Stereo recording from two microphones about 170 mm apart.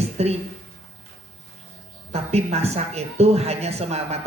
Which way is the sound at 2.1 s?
40° right (ahead or behind).